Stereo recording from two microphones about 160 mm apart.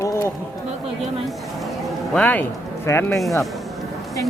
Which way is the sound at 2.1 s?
10° left (ahead or behind).